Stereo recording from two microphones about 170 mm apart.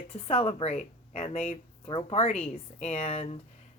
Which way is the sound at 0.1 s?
40° left (ahead or behind).